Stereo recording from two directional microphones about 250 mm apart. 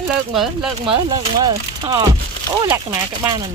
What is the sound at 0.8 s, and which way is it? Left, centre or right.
Speech, centre.